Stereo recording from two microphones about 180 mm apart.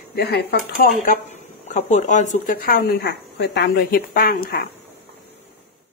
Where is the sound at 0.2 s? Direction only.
65° left (ahead or behind).